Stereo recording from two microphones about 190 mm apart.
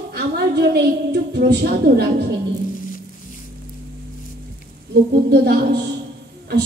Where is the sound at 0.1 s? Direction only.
60° right (ahead or behind).